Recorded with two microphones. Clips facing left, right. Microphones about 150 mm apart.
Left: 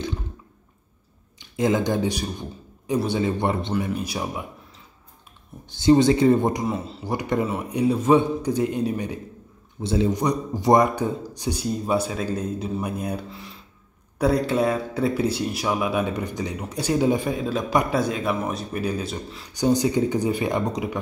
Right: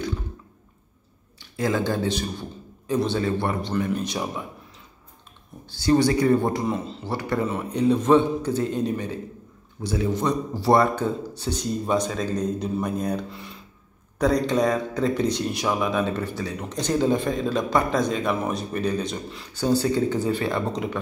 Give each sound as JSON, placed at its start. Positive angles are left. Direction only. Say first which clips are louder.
{"t": 1.4, "sound": "a man's voice", "louder": "left 3 dB", "side_deg": 20}
{"t": 3.8, "sound": "speech", "louder": "right 1 dB", "side_deg": 10}
{"t": 5.7, "sound": "speech", "louder": "left 3 dB", "side_deg": 20}
{"t": 6.6, "sound": "speech", "louder": "even", "side_deg": 5}
{"t": 7.2, "sound": "speech", "louder": "left 1 dB", "side_deg": 20}
{"t": 19.5, "sound": "speech", "louder": "left 1 dB", "side_deg": 15}